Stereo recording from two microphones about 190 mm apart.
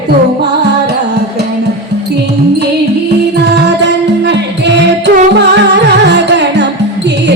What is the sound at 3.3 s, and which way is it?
Music, 65° right (ahead or behind).